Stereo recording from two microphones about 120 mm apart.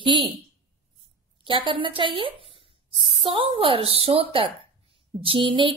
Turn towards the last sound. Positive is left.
turn(degrees=-45)  # may be behind; listen again after turning